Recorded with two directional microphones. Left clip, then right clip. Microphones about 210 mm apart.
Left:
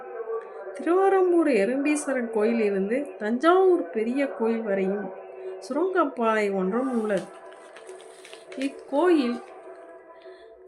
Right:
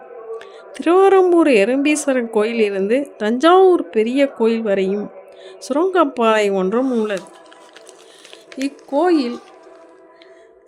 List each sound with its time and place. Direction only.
0.3 s a woman's voice: 45° right (ahead or behind)
8.5 s speech: 30° right (ahead or behind)